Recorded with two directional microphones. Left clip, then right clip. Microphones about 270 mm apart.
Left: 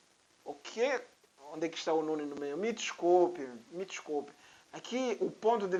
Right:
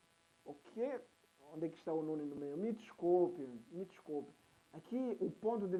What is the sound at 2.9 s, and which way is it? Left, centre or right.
Speech, centre.